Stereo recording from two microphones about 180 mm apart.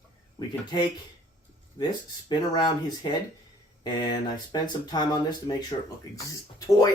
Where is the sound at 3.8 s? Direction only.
25° left (ahead or behind).